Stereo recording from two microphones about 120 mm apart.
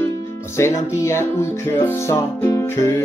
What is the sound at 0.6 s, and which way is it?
Music, 25° left (ahead or behind).